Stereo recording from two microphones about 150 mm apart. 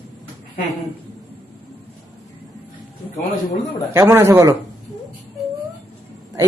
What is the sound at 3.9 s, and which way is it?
Speech, 15° right (ahead or behind).